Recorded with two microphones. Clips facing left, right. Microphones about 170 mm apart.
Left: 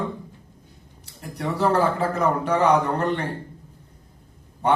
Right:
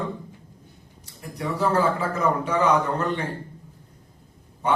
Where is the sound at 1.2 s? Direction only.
65° left (ahead or behind).